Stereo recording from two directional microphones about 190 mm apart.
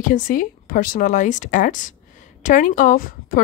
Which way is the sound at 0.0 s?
45° left (ahead or behind).